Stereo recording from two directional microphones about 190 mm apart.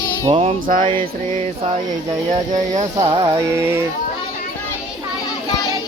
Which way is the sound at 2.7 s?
35° right (ahead or behind).